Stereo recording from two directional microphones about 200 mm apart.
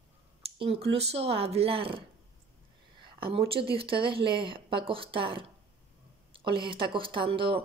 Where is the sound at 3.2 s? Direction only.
25° right (ahead or behind).